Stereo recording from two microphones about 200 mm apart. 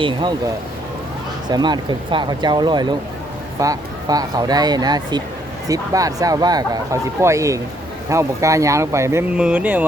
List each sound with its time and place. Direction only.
0.0 s speech: 25° right (ahead or behind)